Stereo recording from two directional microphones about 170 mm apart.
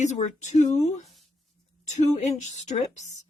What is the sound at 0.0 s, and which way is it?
A woman's voice, 45° left (ahead or behind).